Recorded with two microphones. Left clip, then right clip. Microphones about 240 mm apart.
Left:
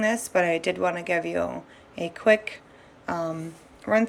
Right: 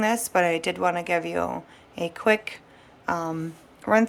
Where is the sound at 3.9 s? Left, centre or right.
Centre.